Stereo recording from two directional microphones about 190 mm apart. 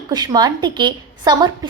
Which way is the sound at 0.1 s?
20° right (ahead or behind).